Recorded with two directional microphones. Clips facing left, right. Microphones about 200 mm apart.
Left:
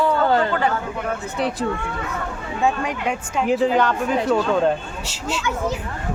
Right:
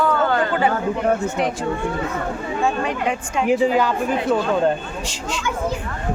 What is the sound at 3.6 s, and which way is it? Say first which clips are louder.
Speech: even; 5° right (ahead or behind).